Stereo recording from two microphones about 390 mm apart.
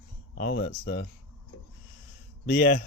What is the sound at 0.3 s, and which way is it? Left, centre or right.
Speech, left.